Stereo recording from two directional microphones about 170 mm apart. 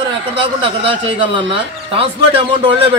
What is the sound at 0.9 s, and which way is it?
Speech, 30° right (ahead or behind).